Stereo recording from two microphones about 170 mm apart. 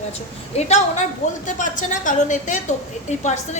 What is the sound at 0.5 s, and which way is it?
A woman's voice, 40° left (ahead or behind).